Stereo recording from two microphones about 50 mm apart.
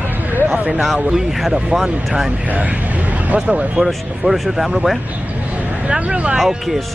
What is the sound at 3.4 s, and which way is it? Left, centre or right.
Speech, centre.